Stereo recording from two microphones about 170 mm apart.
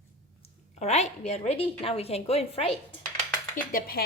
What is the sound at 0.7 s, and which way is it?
A woman's voice, 40° left (ahead or behind).